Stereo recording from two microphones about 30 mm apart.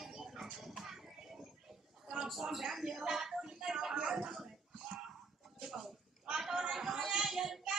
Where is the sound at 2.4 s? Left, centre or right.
Centre.